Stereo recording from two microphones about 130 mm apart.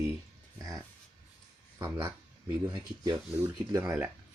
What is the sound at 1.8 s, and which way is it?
Speech, 20° right (ahead or behind).